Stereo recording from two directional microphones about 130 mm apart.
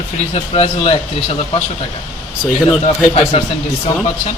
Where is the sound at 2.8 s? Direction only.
50° left (ahead or behind).